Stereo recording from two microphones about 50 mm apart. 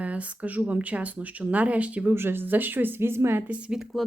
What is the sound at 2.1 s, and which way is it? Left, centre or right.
Speech, right.